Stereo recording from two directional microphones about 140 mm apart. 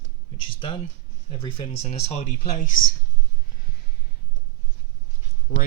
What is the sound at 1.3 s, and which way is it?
Speech, 35° left (ahead or behind).